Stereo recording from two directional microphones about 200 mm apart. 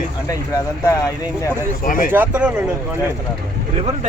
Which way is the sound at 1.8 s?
45° left (ahead or behind).